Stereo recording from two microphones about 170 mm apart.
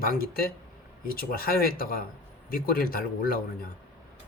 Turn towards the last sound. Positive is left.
turn(degrees=60)  # may be behind; listen again after turning